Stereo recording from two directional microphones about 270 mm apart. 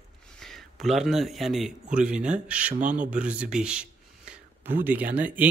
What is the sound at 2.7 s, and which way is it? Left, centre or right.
Speech, right.